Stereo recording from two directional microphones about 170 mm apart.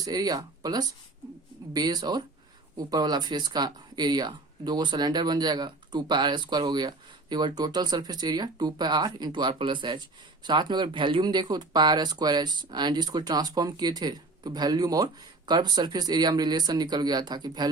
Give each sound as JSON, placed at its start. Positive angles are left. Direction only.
{"t": 0.0, "sound": "speech", "side_deg": -20}